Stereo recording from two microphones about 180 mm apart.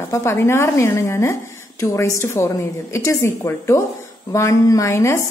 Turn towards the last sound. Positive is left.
turn(degrees=15)  # may be behind; listen again after turning